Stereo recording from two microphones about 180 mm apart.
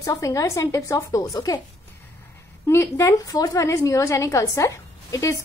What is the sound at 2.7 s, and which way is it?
A woman's voice, 15° left (ahead or behind).